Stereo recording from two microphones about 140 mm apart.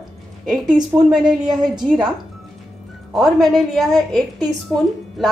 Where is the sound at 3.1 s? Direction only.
Centre (ahead or behind).